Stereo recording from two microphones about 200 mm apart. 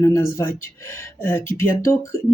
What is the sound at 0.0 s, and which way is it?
A woman's voice, 15° left (ahead or behind).